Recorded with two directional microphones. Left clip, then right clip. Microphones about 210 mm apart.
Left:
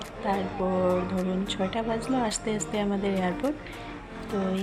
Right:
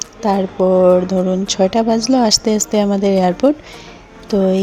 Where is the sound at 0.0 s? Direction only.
55° right (ahead or behind).